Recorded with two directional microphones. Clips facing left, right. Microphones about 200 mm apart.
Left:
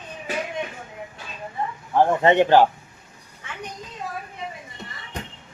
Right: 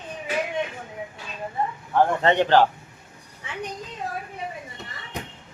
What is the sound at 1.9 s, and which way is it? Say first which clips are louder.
Speech: left 3 dB; 15° left (ahead or behind).